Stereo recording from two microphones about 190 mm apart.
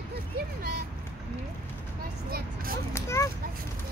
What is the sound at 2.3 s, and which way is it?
Speech, 50° right (ahead or behind).